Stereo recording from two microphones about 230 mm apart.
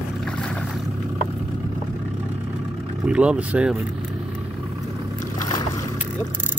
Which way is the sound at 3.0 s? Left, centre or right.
Centre.